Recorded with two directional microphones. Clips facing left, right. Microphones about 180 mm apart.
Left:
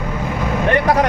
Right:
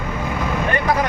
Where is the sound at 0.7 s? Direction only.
70° left (ahead or behind).